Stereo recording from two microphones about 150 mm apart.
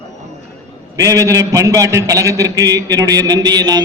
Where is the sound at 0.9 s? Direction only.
20° right (ahead or behind).